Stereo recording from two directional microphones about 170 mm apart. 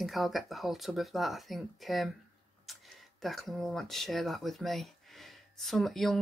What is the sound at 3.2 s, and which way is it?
Speech, centre (ahead or behind).